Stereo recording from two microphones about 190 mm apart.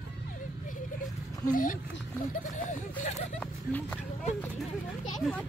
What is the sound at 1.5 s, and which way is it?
Speech, 45° left (ahead or behind).